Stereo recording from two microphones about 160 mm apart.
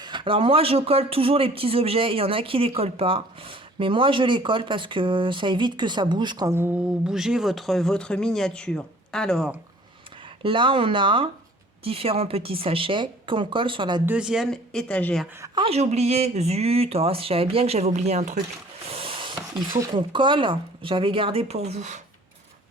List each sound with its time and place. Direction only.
0.0 s speech: 30° right (ahead or behind); by 9.5 s 5° left (ahead or behind)
10.4 s speech: 30° right (ahead or behind)
14.0 s speech: 10° right (ahead or behind); by 15.2 s 10° left (ahead or behind)
15.5 s speech: 40° right (ahead or behind)
18.9 s a sound: 35° right (ahead or behind)
19.8 s speech: 30° right (ahead or behind); by 22.0 s 45° right (ahead or behind)